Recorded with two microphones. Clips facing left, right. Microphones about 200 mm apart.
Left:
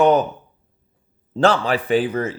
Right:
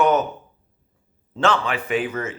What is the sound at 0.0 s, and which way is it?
Speech, 35° left (ahead or behind).